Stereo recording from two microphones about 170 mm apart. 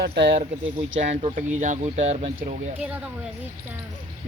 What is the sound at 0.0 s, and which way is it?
Speech, 75° right (ahead or behind).